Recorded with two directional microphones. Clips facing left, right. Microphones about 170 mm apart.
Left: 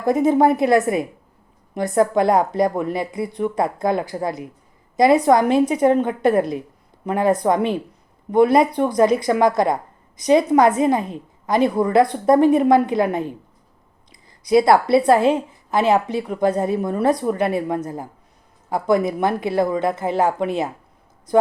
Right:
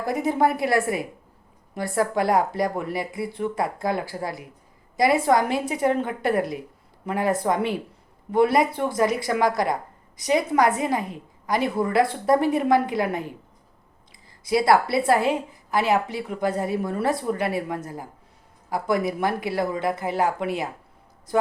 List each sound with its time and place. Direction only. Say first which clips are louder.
0.0 s a woman's voice: left 6 dB; 20° left (ahead or behind)
14.4 s a woman's voice: left 5 dB; 20° left (ahead or behind)